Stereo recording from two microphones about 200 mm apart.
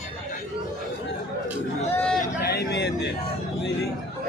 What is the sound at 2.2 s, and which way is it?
Speech, 50° left (ahead or behind).